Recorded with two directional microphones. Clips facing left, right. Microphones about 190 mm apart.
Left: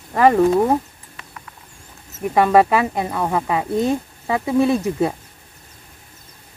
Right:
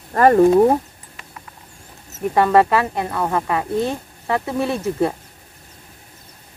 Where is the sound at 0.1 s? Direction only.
5° left (ahead or behind).